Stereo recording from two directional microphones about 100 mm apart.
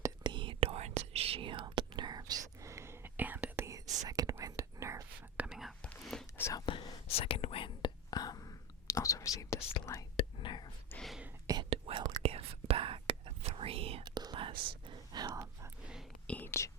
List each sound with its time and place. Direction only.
0.2 s whispering: 50° right (ahead or behind); by 5.0 s 30° right (ahead or behind)
5.5 s whispering: centre (ahead or behind)
5.8 s whispering: 10° left (ahead or behind)
6.7 s whispering: 60° left (ahead or behind)
7.1 s whispering: 70° left (ahead or behind)
8.1 s whispering: 40° left (ahead or behind)
10.2 s whispering: 55° left (ahead or behind)
10.9 s whispering: 20° left (ahead or behind)
11.7 s whispering: 75° right (ahead or behind)
14.0 s whispering: 45° right (ahead or behind)
16.2 s whispering: 15° left (ahead or behind)
16.5 s whispering: 30° left (ahead or behind)